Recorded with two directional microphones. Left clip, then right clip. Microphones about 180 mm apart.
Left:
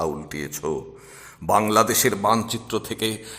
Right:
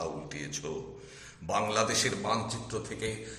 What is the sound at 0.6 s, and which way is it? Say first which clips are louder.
Speech: left 13 dB; 45° left (ahead or behind).